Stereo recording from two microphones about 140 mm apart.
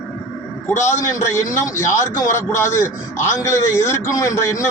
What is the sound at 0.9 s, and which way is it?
A man's voice, 20° left (ahead or behind).